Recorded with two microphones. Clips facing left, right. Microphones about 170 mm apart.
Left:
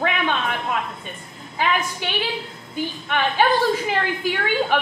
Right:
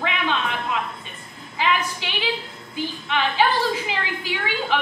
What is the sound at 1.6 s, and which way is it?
A woman's voice, 50° left (ahead or behind).